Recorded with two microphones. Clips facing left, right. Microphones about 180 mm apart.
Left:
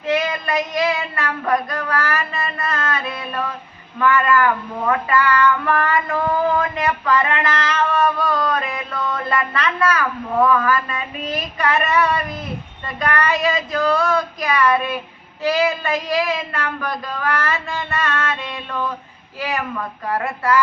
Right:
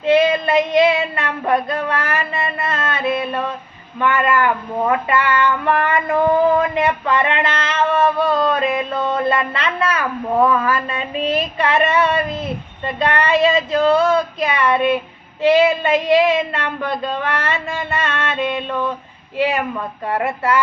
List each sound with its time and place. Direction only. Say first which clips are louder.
0.0 s child singing: right 7 dB; 25° right (ahead or behind)
4.0 s speech: even; 25° right (ahead or behind)